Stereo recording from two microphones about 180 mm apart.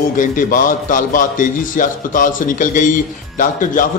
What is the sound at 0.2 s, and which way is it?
A man's voice, 50° left (ahead or behind).